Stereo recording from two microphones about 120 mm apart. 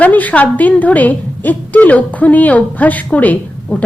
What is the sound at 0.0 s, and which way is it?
A woman's voice, 15° left (ahead or behind).